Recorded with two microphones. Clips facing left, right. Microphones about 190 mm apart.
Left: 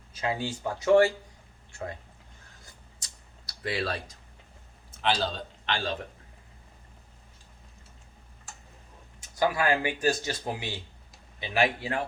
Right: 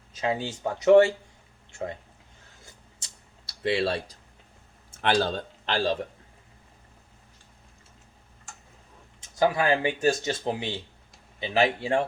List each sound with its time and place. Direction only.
0.1 s speech: 20° right (ahead or behind)
3.0 s a sound: 25° right (ahead or behind)
4.9 s a man's voice: 50° right (ahead or behind)
9.3 s speech: 25° right (ahead or behind)